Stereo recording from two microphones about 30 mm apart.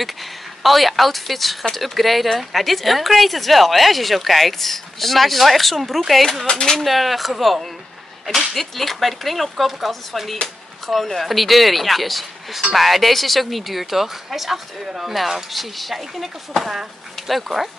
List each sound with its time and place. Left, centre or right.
0.0 s a woman's voice: centre
6.5 s speech: centre
6.8 s a woman's voice: centre